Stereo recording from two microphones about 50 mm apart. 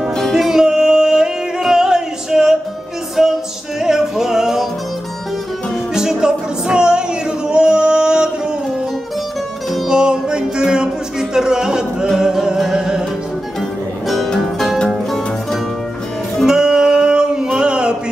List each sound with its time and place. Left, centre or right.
0.3 s music: centre
3.2 s a capella: centre
3.8 s music: centre
5.9 s music: centre
9.8 s music: centre
13.6 s music: centre
16.4 s music: centre